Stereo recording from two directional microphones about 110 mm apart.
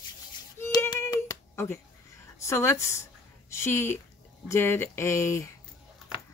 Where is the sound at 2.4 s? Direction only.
25° left (ahead or behind).